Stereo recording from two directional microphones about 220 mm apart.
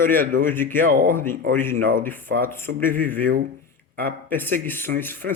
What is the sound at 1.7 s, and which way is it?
Speech, 40° right (ahead or behind).